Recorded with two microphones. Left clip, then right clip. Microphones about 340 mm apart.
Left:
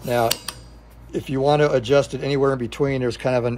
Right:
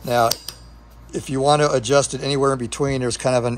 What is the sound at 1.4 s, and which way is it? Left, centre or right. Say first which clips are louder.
Speech: right 1 dB; centre.